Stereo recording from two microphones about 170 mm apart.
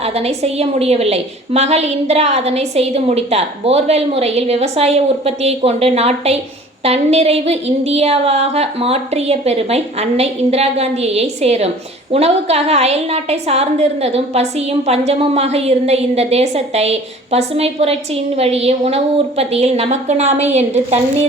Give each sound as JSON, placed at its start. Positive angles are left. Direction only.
{"t": 0.0, "sound": "a woman's voice", "side_deg": -40}